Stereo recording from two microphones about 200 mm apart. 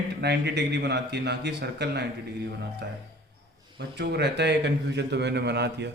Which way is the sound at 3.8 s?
55° right (ahead or behind).